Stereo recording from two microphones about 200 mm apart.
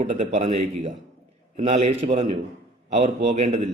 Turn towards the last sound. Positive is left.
turn(degrees=-35)  # may be behind; listen again after turning